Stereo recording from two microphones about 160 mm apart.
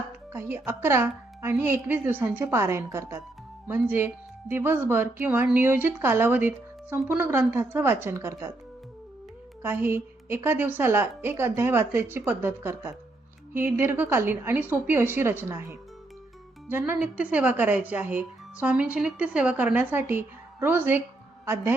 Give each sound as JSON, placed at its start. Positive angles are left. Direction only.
{"t": 0.3, "sound": "speech", "side_deg": -15}
{"t": 9.6, "sound": "a woman's voice", "side_deg": -15}